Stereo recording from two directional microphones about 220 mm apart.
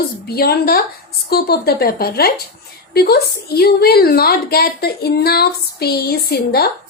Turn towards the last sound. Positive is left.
turn(degrees=45)  # may be behind; listen again after turning